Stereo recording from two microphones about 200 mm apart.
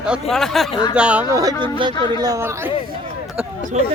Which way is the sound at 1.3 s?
20° right (ahead or behind).